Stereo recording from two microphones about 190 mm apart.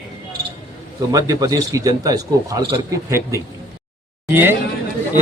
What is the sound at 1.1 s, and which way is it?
A man's voice, 20° right (ahead or behind).